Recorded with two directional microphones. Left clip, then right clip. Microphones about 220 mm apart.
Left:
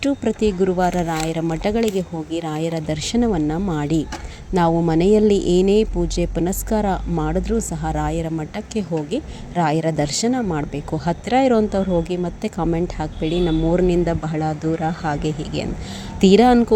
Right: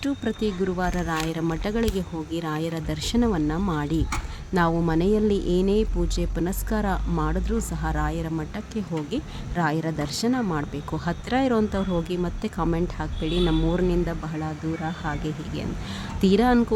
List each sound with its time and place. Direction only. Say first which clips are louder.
0.0 s speech: left 7 dB; 15° left (ahead or behind)